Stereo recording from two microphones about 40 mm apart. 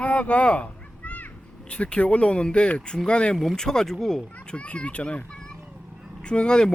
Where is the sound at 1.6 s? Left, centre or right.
Left.